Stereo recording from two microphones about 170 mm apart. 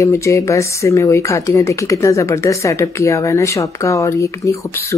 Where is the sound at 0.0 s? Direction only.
15° left (ahead or behind).